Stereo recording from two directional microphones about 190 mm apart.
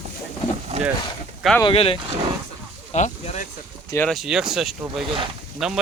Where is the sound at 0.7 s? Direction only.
35° right (ahead or behind).